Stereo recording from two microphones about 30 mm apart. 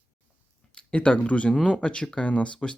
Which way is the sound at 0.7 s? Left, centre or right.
Left.